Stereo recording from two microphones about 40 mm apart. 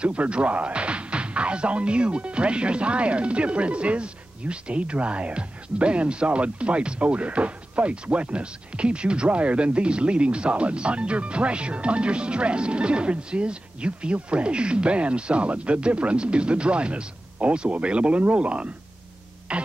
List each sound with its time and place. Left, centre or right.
0.0 s speech: right
19.5 s throat clearing: right